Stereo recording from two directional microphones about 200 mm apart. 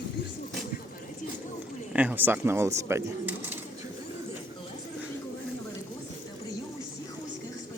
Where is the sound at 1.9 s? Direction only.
10° right (ahead or behind).